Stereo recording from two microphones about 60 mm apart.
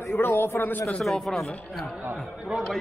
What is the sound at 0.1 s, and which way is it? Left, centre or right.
Speech, left.